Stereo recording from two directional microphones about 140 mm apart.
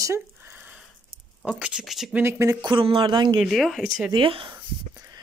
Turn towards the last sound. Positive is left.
turn(degrees=-35)  # may be behind; listen again after turning